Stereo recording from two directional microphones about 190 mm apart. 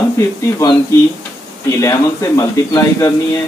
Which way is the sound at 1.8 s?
20° left (ahead or behind).